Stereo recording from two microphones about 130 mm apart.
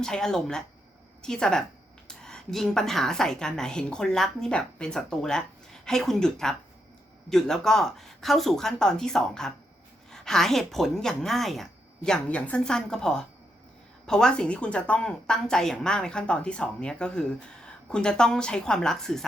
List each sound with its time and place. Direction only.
0.0 s a woman's voice: 5° left (ahead or behind)